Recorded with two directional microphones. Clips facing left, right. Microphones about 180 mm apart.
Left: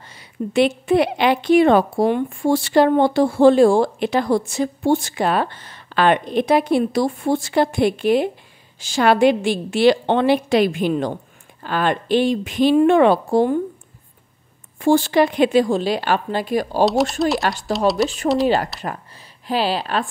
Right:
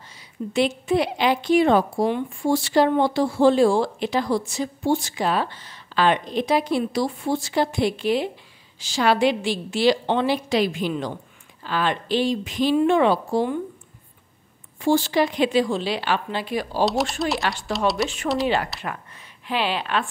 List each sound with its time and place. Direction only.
0.1 s a woman's voice: 60° left (ahead or behind)
14.8 s a woman's voice: 50° left (ahead or behind)
16.8 s speech: centre (ahead or behind)
17.4 s speech: 40° left (ahead or behind)
17.7 s speech: centre (ahead or behind)
19.4 s speech: 35° left (ahead or behind)